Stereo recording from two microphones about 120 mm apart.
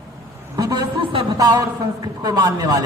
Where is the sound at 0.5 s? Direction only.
30° right (ahead or behind).